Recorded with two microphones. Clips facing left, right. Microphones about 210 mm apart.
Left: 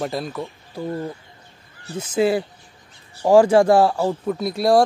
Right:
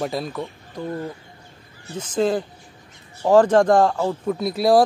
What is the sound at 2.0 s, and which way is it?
Speech, 10° left (ahead or behind).